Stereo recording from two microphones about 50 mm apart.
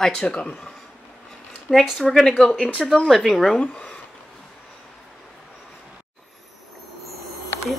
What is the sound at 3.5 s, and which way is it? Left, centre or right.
Speech, centre.